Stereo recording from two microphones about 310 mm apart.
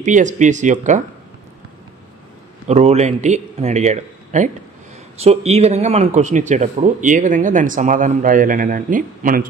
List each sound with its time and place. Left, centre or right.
0.0 s speech: right
2.7 s speech: right